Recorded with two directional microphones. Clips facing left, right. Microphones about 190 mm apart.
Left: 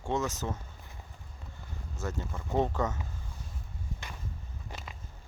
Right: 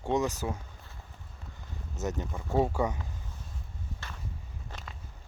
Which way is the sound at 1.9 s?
20° right (ahead or behind).